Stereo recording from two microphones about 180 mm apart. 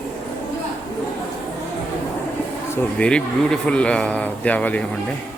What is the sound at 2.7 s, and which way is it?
Speech, 5° left (ahead or behind).